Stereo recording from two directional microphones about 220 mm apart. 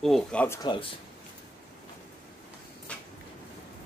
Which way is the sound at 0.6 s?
20° left (ahead or behind).